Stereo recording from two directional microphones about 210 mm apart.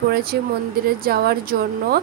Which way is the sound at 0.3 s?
50° right (ahead or behind).